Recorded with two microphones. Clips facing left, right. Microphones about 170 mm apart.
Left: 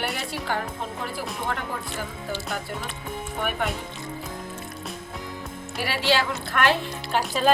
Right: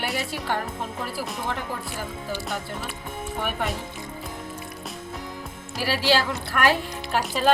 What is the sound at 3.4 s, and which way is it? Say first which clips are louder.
Speech: left 1 dB; centre (ahead or behind).